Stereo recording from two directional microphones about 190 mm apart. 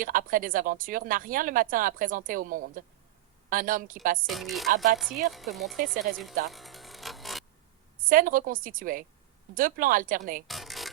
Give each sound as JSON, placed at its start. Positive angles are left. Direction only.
{"t": 0.0, "sound": "speech", "side_deg": -45}
{"t": 4.3, "sound": "speech", "side_deg": 0}
{"t": 6.0, "sound": "speech", "side_deg": -45}
{"t": 6.5, "sound": "music", "side_deg": 0}
{"t": 8.0, "sound": "speech", "side_deg": -45}
{"t": 10.4, "sound": "music", "side_deg": 0}